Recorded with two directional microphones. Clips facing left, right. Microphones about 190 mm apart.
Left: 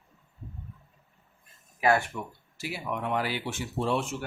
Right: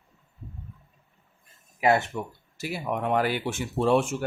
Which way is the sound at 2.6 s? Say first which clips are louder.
Right 4 dB; 45° right (ahead or behind).